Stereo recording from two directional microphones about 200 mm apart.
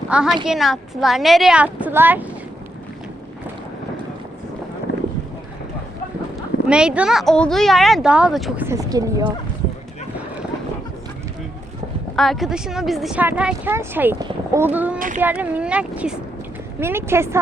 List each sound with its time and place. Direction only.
0.1 s a woman's voice: 5° right (ahead or behind)
6.7 s a woman's voice: 5° right (ahead or behind)
8.6 s speech: 15° right (ahead or behind)
12.1 s a woman's voice: centre (ahead or behind)
14.9 s child singing: 40° right (ahead or behind)
15.2 s speech: 5° right (ahead or behind)